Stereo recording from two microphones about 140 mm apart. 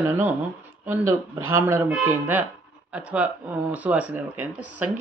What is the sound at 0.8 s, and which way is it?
A man's voice, 15° right (ahead or behind).